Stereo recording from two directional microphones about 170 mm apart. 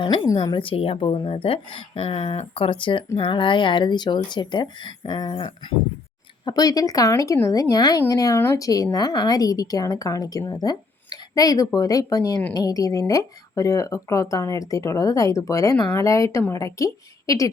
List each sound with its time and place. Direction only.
0.0 s a woman's voice: 30° left (ahead or behind)